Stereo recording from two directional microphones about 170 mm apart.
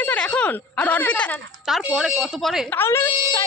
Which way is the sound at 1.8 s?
5° right (ahead or behind).